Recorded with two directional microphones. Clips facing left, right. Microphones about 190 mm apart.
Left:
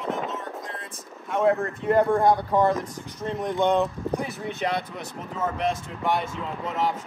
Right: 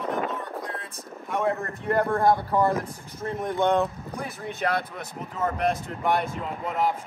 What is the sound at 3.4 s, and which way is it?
Speech, 15° left (ahead or behind).